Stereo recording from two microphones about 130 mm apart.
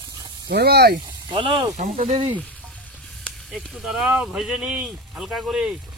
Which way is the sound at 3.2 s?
Centre (ahead or behind).